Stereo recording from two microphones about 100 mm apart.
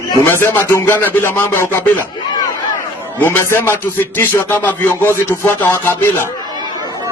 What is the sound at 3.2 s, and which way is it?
Speech, 25° left (ahead or behind).